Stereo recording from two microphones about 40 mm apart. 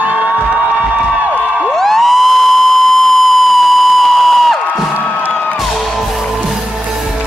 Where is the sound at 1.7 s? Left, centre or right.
Centre.